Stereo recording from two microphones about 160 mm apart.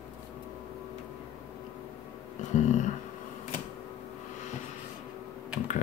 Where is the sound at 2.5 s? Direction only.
50° left (ahead or behind).